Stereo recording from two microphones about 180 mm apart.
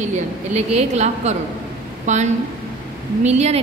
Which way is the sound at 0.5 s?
40° right (ahead or behind).